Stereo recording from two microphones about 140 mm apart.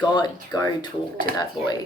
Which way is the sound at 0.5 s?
30° left (ahead or behind).